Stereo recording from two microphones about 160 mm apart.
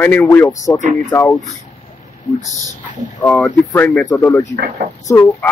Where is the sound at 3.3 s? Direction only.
10° left (ahead or behind).